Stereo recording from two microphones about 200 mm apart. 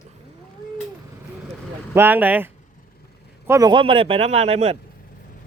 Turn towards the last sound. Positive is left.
turn(degrees=-30)  # may be behind; listen again after turning